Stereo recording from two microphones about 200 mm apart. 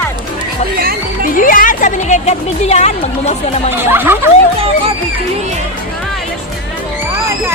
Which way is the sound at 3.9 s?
10° right (ahead or behind).